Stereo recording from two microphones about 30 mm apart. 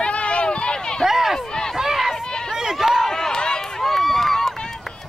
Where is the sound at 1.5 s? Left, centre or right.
Left.